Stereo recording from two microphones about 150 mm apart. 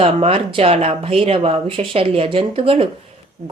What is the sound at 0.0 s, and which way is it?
Speech, 40° right (ahead or behind).